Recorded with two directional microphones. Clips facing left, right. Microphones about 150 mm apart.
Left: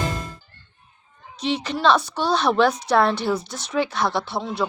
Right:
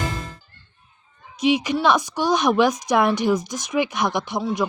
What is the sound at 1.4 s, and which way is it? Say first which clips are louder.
Speech: right 4 dB; 10° right (ahead or behind).